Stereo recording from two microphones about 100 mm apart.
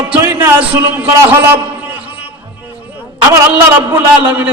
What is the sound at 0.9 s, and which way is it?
Speech, 20° right (ahead or behind).